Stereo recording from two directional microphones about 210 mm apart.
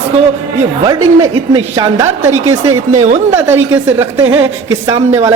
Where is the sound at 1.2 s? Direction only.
20° right (ahead or behind).